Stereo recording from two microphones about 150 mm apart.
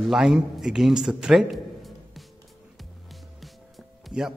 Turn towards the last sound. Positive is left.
turn(degrees=-5)  # may be behind; listen again after turning